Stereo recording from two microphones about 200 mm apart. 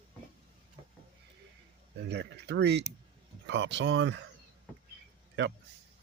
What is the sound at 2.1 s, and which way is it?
Speech, 55° right (ahead or behind).